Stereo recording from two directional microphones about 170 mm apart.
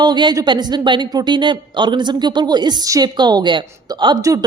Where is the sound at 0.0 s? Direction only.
25° right (ahead or behind).